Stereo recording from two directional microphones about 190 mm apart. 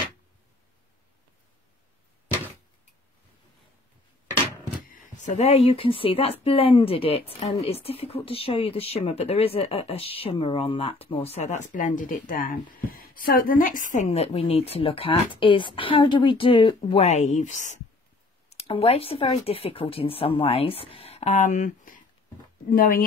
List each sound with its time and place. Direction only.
4.8 s speech: 45° left (ahead or behind)